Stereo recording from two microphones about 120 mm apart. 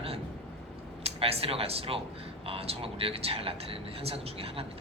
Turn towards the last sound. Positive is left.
turn(degrees=-55)  # may be behind; listen again after turning